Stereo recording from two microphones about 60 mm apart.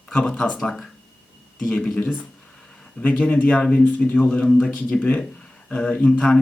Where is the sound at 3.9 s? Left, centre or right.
Left.